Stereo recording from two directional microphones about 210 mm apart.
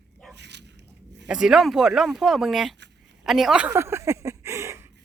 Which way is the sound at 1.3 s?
5° right (ahead or behind).